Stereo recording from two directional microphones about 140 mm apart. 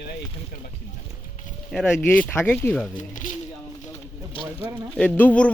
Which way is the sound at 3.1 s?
65° left (ahead or behind).